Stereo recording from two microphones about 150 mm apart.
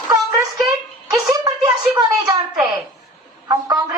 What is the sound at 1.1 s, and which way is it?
Music, 25° right (ahead or behind).